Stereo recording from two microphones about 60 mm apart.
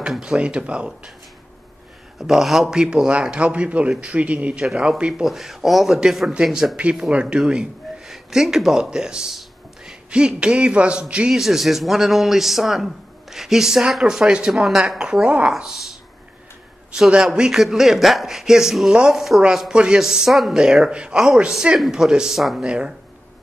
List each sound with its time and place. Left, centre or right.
0.2 s speech: centre
2.1 s a man's voice: centre
5.2 s speech: centre
7.1 s speech: centre
11.3 s a man's voice: centre
15.6 s speech: centre
17.2 s speech: centre